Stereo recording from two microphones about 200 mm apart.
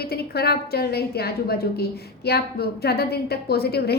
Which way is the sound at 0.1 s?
50° left (ahead or behind).